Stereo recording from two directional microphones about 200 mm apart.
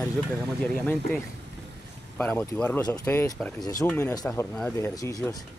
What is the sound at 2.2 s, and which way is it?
Speech, 5° left (ahead or behind).